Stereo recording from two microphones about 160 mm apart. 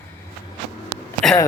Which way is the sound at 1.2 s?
5° left (ahead or behind).